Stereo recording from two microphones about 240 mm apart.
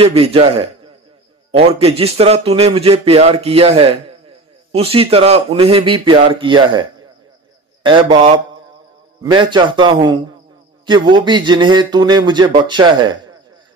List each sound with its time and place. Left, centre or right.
0.0 s a man's voice: right